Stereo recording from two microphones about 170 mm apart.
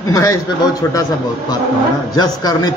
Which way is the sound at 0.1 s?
20° left (ahead or behind).